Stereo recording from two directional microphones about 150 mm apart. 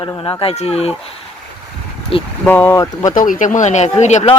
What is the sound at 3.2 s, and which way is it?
Speech, 60° left (ahead or behind).